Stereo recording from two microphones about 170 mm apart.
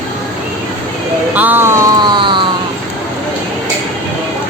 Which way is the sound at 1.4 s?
10° right (ahead or behind).